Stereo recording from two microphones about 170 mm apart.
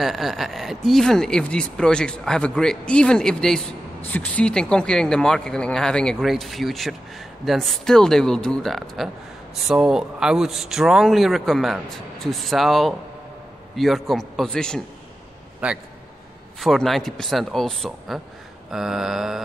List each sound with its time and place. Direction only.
0.0 s speech: centre (ahead or behind)
15.6 s a man's voice: 5° right (ahead or behind)